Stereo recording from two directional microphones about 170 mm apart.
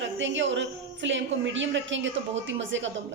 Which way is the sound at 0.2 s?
90° right.